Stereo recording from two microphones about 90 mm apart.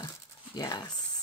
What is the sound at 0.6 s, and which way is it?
Speech, 45° left (ahead or behind).